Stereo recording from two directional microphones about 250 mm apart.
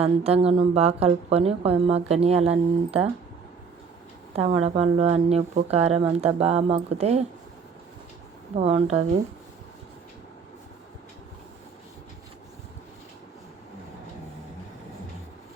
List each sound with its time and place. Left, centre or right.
0.0 s a woman's voice: right
4.4 s a woman's voice: right
8.5 s a woman's voice: right